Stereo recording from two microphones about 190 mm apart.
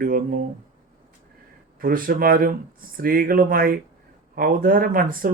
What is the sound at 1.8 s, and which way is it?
Speech, 50° right (ahead or behind).